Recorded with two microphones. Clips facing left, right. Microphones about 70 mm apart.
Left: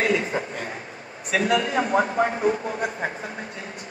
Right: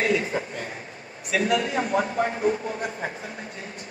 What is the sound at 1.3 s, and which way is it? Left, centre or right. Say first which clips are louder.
A man's voice: left 2 dB; left.